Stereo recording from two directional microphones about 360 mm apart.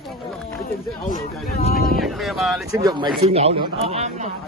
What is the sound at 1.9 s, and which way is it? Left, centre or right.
A man's voice, centre.